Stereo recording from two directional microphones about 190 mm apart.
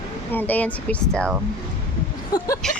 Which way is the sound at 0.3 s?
10° left (ahead or behind).